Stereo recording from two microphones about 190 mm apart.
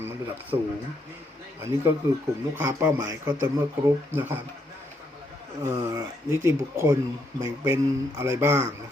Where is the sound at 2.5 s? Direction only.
15° right (ahead or behind).